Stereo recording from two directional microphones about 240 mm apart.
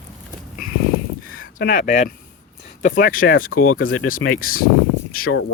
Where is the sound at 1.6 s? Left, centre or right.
Left.